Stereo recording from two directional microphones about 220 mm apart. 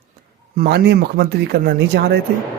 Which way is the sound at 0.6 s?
45° right (ahead or behind).